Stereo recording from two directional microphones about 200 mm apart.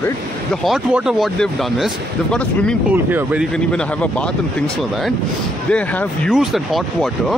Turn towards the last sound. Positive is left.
turn(degrees=0)  # may be behind; listen again after turning